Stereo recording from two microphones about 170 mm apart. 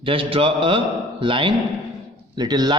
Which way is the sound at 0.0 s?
30° right (ahead or behind).